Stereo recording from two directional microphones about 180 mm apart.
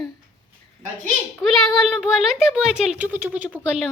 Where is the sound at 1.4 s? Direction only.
5° right (ahead or behind).